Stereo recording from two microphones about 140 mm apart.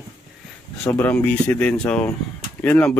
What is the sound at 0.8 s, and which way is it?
Speech, 10° left (ahead or behind).